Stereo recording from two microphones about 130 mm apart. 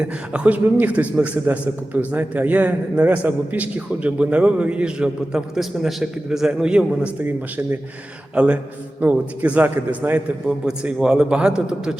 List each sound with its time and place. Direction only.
0.0 s a man's voice: 10° right (ahead or behind)